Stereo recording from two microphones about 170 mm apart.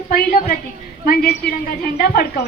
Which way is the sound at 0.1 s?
60° left (ahead or behind).